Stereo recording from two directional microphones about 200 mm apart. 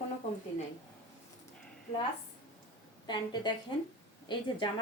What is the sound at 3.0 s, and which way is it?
Speech, 20° left (ahead or behind).